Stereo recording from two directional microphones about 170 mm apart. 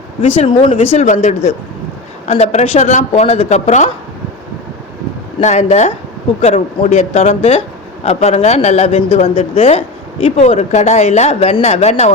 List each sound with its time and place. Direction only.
0.2 s speech: 35° left (ahead or behind)
5.4 s speech: 45° left (ahead or behind)